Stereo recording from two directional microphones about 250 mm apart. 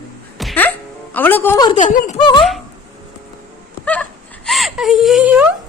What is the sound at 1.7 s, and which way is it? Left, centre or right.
Speech, left.